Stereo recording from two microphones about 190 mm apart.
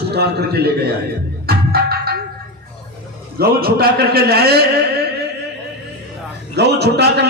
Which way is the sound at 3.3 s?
55° right (ahead or behind).